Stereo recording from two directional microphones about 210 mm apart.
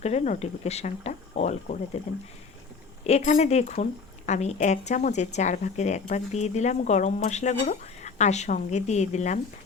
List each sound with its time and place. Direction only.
0.0 s speech: 30° left (ahead or behind)
3.1 s speech: 35° left (ahead or behind)